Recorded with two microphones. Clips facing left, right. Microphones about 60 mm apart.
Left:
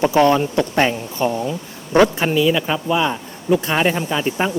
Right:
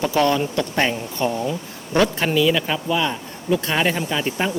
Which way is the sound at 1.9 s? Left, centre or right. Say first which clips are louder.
Left 4 dB; centre.